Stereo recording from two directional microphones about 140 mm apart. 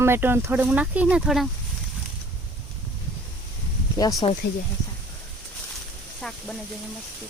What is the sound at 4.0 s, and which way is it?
Speech, 25° left (ahead or behind).